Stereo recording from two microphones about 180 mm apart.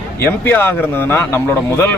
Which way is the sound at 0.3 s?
10° left (ahead or behind).